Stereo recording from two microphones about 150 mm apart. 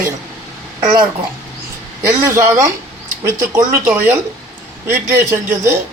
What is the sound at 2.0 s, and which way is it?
Speech, 20° right (ahead or behind).